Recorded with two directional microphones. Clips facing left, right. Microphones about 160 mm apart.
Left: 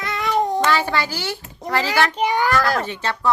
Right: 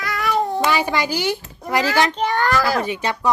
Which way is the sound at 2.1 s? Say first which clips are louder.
Left 1 dB; 10° left (ahead or behind).